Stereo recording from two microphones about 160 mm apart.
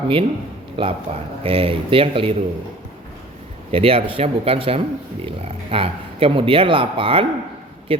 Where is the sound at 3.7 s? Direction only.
35° right (ahead or behind).